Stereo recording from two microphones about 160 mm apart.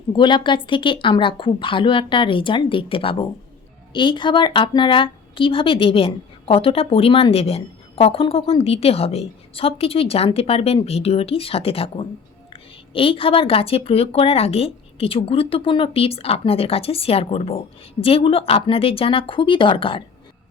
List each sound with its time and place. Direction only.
0.1 s a woman's voice: 30° left (ahead or behind)